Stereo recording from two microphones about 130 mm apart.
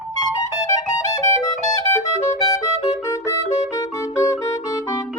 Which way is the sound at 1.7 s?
25° left (ahead or behind).